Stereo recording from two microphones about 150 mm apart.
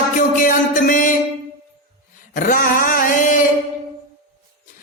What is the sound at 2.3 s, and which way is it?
Music, 65° left (ahead or behind).